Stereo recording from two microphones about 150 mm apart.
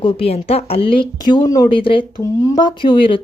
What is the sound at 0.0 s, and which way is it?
Speech, 40° left (ahead or behind).